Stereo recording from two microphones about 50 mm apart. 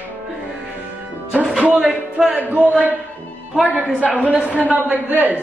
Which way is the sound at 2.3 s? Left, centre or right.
Right.